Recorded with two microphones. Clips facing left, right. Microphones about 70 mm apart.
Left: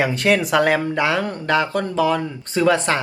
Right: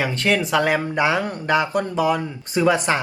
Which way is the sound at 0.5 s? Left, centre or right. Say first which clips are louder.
Left 2 dB; centre.